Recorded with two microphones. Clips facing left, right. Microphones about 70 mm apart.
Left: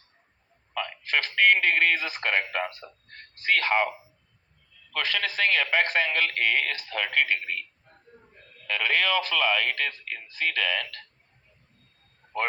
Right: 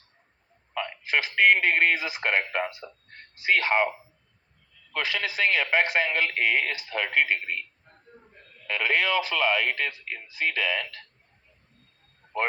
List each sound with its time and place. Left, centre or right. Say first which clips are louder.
0.8 s music: right 1 dB; centre
1.6 s speech: right 1 dB; centre
4.9 s speech: even; centre
8.7 s speech: even; centre
12.2 s a sound: right 1 dB; centre